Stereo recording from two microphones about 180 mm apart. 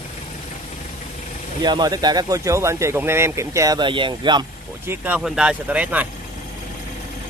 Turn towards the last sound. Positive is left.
turn(degrees=-10)  # may be behind; listen again after turning